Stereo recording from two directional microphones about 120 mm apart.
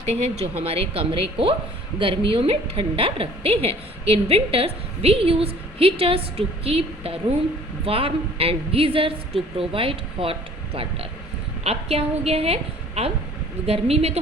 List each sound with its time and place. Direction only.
0.0 s a woman's voice: 60° right (ahead or behind)
11.6 s a woman's voice: 60° right (ahead or behind)